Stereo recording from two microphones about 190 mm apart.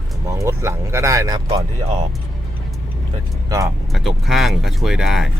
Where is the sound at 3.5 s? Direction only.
15° right (ahead or behind).